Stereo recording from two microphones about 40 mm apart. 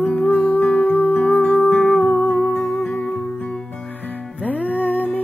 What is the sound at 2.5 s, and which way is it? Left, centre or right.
Music, centre.